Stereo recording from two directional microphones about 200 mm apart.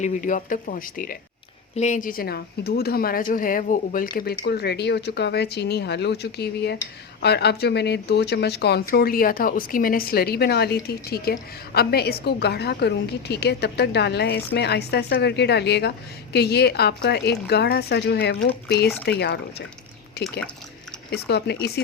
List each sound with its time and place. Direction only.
0.0 s a woman's voice: 40° left (ahead or behind); by 19.6 s 55° left (ahead or behind)
21.1 s a woman's voice: 55° left (ahead or behind)